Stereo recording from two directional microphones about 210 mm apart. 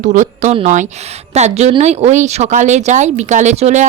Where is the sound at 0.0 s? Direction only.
35° right (ahead or behind).